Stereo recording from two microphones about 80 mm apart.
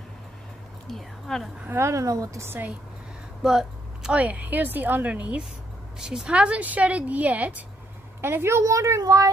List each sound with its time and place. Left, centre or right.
0.8 s speech: centre
1.8 s a woman's voice: right
2.4 s a woman's voice: right
3.4 s a sound: centre
4.2 s a woman's voice: centre
5.9 s a woman's voice: centre; by 9.3 s right